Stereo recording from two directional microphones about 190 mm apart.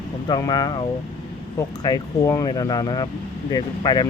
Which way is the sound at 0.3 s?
20° left (ahead or behind).